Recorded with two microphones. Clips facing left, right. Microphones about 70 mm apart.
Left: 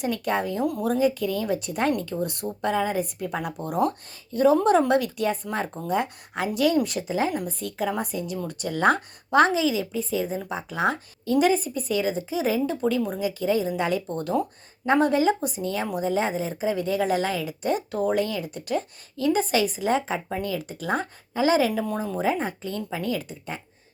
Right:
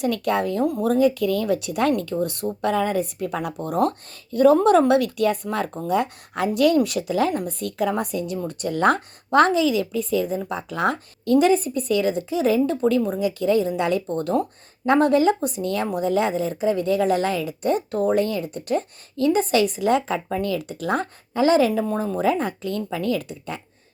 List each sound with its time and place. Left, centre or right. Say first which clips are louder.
0.0 s a woman's voice: right 4 dB; right
2.2 s a woman's voice: right 4 dB; right
2.6 s a woman's voice: right 2 dB; right
3.8 s a woman's voice: right 2 dB; right
5.9 s a woman's voice: right 3 dB; right
7.3 s a woman's voice: right 4 dB; right
8.4 s a woman's voice: right 2 dB; right
22.2 s a woman's voice: right 3 dB; right